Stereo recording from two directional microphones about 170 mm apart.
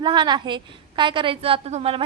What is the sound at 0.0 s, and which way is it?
A woman's voice, 25° right (ahead or behind).